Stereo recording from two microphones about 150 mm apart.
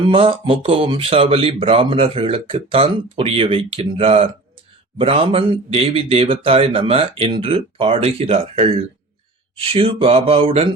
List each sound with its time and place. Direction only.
0.1 s speech: 35° right (ahead or behind)